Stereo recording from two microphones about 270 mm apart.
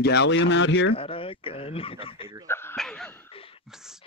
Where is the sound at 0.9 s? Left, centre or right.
Centre.